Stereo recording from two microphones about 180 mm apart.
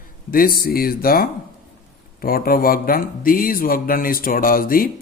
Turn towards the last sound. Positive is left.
turn(degrees=50)  # may be behind; listen again after turning